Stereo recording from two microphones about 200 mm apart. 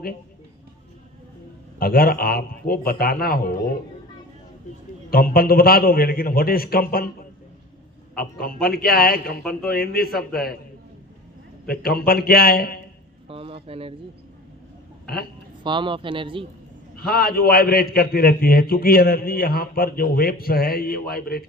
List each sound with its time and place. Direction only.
1.8 s a man's voice: 50° left (ahead or behind)
5.1 s a man's voice: 50° left (ahead or behind)
8.1 s a man's voice: 50° left (ahead or behind)
9.4 s a man's voice: centre (ahead or behind)
9.6 s a man's voice: 50° left (ahead or behind)
11.6 s a man's voice: 50° left (ahead or behind)
13.2 s a sound: 30° right (ahead or behind)
15.0 s a woman's voice: 50° left (ahead or behind)
15.6 s speech: 25° right (ahead or behind)
17.1 s a man's voice: 50° left (ahead or behind)